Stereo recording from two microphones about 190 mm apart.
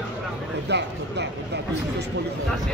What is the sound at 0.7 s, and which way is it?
Speech, 65° right (ahead or behind).